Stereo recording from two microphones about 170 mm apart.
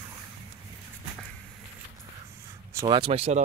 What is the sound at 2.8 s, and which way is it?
Speech, 30° right (ahead or behind).